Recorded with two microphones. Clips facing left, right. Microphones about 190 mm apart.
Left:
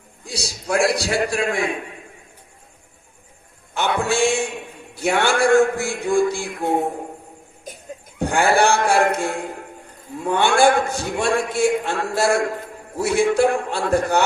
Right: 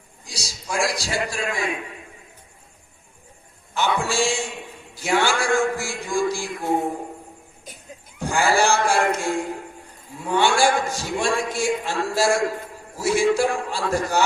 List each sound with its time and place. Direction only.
0.3 s a man's voice: 60° left (ahead or behind)
3.8 s a sound: 55° left (ahead or behind)
4.9 s a man's voice: 60° left (ahead or behind)
8.2 s a man's voice: 60° left (ahead or behind)